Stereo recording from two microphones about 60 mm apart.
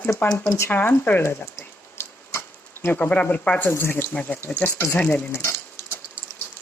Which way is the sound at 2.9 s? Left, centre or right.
Left.